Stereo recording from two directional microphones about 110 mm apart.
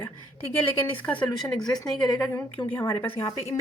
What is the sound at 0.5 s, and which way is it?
Speech, 15° left (ahead or behind).